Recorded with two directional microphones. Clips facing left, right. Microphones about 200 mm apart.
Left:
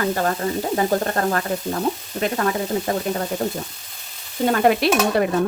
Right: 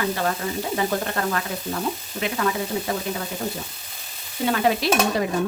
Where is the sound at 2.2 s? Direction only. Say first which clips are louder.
Left 3 dB; 45° left (ahead or behind).